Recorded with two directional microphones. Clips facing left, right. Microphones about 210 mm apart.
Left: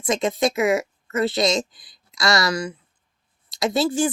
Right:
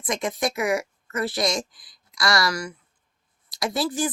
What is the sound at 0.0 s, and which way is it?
A woman's voice, 25° left (ahead or behind).